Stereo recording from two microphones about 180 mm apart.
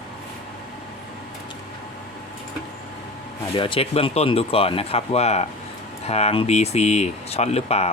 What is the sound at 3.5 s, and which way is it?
Speech, 30° left (ahead or behind).